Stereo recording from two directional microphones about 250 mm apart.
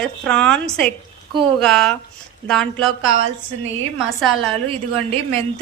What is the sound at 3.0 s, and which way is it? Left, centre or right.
Speech, right.